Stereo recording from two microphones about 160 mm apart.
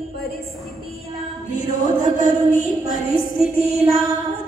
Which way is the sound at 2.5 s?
60° left (ahead or behind).